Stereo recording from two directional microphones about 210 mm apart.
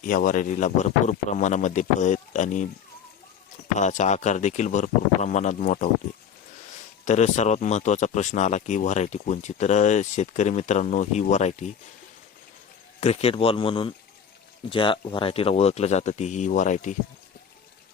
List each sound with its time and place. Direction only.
0.0 s speech: 40° left (ahead or behind)
3.8 s speech: 35° left (ahead or behind)
7.0 s speech: 35° left (ahead or behind)
13.0 s speech: 30° left (ahead or behind)